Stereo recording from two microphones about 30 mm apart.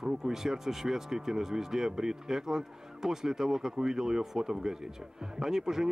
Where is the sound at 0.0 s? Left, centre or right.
Centre.